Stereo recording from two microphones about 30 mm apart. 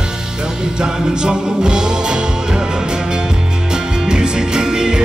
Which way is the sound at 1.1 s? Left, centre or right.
Right.